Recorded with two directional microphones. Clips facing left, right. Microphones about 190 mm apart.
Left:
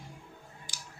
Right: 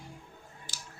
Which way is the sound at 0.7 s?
15° left (ahead or behind).